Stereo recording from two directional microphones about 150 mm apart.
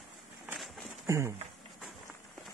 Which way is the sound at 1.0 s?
20° right (ahead or behind).